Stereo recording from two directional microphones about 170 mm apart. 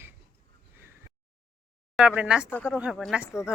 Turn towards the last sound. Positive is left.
turn(degrees=0)  # may be behind; listen again after turning